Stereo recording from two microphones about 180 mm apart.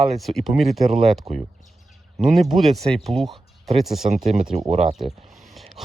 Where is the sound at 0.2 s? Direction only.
Centre (ahead or behind).